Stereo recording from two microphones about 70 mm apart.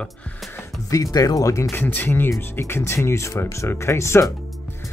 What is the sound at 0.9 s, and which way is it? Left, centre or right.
Speech, left.